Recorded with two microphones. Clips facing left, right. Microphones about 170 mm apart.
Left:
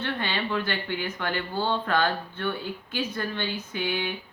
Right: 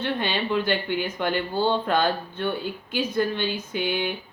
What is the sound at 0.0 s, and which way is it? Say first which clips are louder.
Speech: right 3 dB; 15° right (ahead or behind).